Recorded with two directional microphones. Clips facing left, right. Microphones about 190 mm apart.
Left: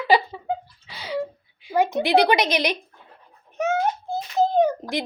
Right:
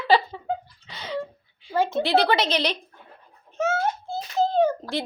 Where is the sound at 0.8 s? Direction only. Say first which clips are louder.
Left 4 dB; 10° left (ahead or behind).